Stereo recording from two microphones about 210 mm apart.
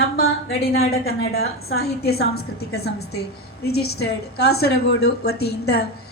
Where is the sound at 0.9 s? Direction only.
45° left (ahead or behind).